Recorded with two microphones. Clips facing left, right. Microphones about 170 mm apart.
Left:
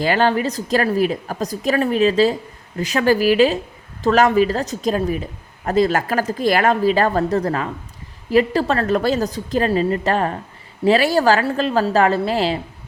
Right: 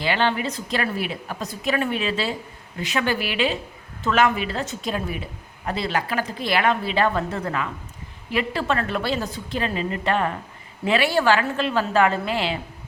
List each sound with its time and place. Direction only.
0.0 s speech: 40° left (ahead or behind)